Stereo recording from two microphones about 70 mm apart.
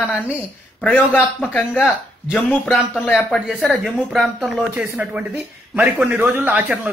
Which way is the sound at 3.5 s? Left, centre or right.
Centre.